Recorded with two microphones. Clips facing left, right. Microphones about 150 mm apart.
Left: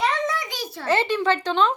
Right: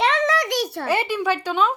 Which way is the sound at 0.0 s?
90° right.